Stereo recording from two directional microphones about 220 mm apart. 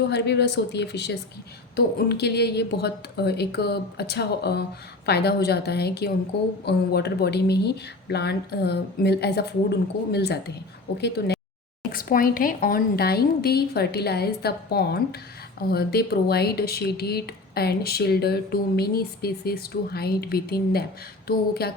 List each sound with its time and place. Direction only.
0.1 s speech: 50° left (ahead or behind)
11.9 s speech: 40° left (ahead or behind)